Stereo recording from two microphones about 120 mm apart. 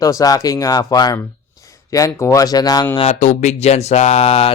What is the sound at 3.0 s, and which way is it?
A man's voice, 75° left (ahead or behind).